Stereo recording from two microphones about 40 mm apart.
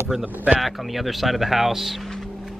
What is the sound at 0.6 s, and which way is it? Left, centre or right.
Speech, centre.